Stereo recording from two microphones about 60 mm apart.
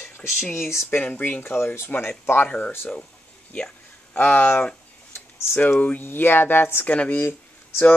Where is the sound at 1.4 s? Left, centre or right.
Left.